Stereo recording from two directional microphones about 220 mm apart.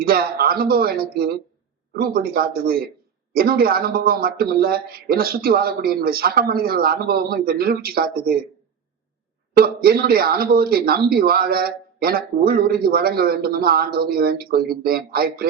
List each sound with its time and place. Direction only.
0.0 s speech: 45° right (ahead or behind)
9.6 s speech: 45° right (ahead or behind)